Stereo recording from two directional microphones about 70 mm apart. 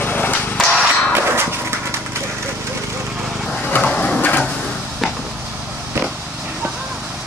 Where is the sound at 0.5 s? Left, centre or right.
Centre.